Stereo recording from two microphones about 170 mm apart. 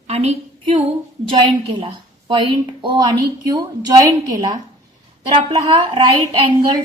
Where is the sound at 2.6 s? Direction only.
25° right (ahead or behind).